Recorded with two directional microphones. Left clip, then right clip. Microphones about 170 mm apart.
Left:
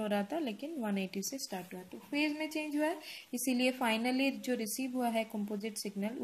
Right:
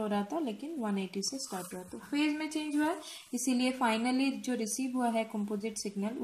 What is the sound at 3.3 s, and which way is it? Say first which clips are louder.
A woman's voice: right 1 dB; 25° left (ahead or behind).